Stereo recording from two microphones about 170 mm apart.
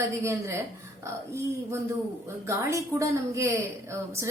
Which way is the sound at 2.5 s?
15° right (ahead or behind).